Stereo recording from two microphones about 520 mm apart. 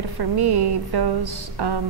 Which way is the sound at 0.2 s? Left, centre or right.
Right.